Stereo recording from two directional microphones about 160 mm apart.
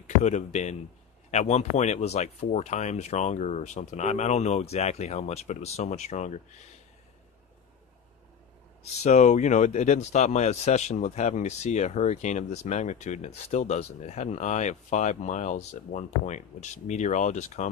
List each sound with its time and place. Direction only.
0.0 s speech: 45° left (ahead or behind)
9.0 s speech: 45° left (ahead or behind)